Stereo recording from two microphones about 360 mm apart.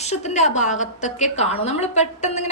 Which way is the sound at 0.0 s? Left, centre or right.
Centre.